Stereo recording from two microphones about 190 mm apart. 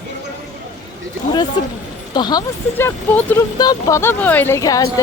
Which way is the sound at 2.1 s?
20° left (ahead or behind).